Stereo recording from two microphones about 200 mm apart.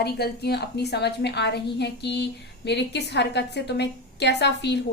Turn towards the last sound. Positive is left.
turn(degrees=60)  # may be behind; listen again after turning